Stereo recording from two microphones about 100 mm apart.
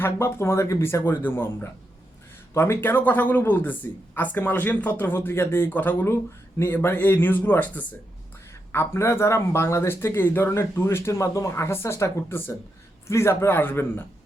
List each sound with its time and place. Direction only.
0.0 s speech: 25° left (ahead or behind)
8.7 s speech: 25° left (ahead or behind)